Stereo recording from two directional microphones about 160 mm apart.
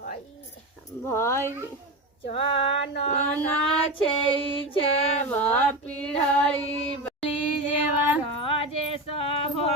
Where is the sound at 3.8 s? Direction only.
30° left (ahead or behind).